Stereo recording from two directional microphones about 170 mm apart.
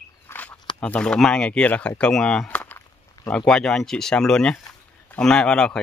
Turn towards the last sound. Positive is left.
turn(degrees=5)  # may be behind; listen again after turning